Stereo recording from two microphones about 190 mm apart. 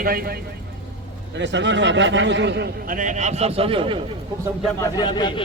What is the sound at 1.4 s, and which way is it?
A man's voice, 70° right (ahead or behind).